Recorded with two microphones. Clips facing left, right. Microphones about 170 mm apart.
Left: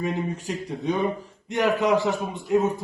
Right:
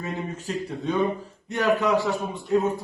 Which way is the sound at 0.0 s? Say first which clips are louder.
Left 4 dB; 15° left (ahead or behind).